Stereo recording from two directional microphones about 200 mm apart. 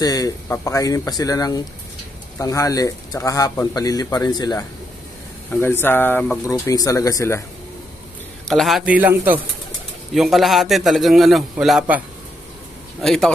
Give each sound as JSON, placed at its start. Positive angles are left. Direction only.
{"t": 0.0, "sound": "speech", "side_deg": 20}
{"t": 8.5, "sound": "a man's voice", "side_deg": 0}
{"t": 13.0, "sound": "a man's voice", "side_deg": 0}